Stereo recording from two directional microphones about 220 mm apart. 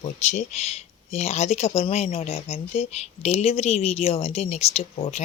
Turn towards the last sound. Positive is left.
turn(degrees=30)  # may be behind; listen again after turning